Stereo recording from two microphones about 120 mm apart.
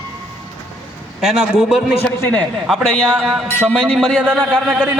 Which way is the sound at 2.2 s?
15° left (ahead or behind).